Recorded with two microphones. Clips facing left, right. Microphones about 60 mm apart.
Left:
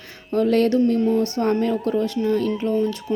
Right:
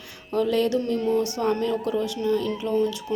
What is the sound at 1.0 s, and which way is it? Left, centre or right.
Speech, left.